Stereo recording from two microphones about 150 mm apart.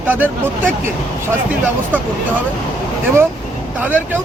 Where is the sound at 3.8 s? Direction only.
10° right (ahead or behind).